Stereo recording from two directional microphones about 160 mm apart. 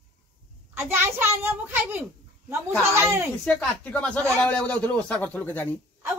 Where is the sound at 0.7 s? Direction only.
15° right (ahead or behind).